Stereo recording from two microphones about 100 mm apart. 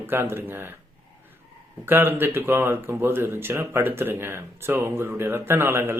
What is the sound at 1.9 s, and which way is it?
Speech, 20° right (ahead or behind).